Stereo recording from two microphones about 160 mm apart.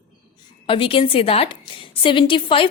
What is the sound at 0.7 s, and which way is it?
A woman's voice, 35° left (ahead or behind).